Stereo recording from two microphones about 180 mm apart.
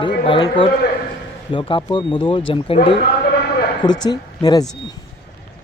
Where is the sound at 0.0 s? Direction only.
25° left (ahead or behind).